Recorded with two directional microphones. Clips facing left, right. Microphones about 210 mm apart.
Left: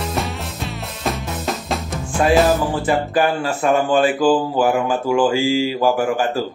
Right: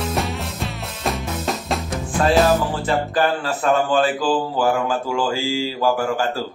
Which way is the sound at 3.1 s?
15° left (ahead or behind).